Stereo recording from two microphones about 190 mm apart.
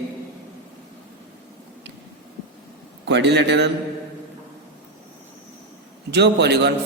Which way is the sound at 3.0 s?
65° right (ahead or behind).